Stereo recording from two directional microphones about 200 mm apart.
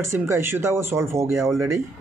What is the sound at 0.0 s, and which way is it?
A man's voice, 15° right (ahead or behind).